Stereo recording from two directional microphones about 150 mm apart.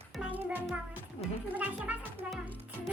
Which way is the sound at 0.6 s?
10° right (ahead or behind).